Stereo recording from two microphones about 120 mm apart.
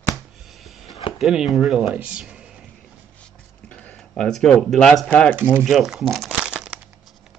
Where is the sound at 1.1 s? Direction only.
Centre (ahead or behind).